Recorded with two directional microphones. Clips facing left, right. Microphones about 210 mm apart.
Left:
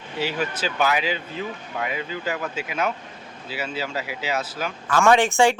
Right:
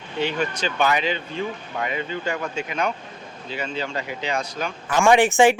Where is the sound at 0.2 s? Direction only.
5° left (ahead or behind).